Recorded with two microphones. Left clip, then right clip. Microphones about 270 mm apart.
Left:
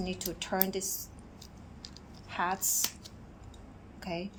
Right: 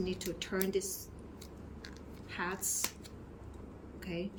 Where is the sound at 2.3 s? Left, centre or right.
Centre.